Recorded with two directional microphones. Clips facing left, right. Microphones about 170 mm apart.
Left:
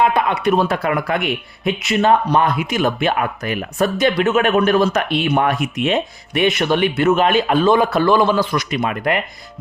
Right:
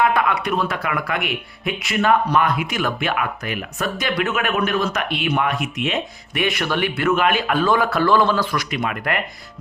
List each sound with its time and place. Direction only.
0.0 s speech: 25° left (ahead or behind)
8.7 s speech: 25° left (ahead or behind)